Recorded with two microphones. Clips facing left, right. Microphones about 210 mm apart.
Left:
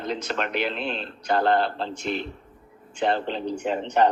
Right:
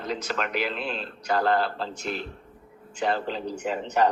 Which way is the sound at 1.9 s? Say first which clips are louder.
Left 3 dB; 5° right (ahead or behind).